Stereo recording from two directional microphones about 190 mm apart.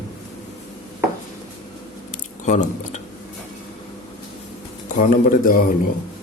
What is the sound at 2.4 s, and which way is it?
Speech, 40° left (ahead or behind).